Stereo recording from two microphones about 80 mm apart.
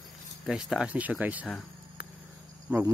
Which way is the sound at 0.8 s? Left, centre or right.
Centre.